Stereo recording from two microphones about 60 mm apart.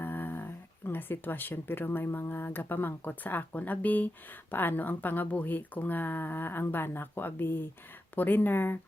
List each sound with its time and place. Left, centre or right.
0.0 s speech: left